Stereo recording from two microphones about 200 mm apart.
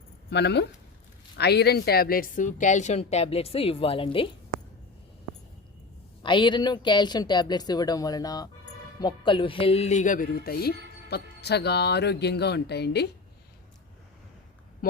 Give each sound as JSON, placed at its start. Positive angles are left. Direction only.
{"t": 0.3, "sound": "speech", "side_deg": 60}
{"t": 6.2, "sound": "speech", "side_deg": 25}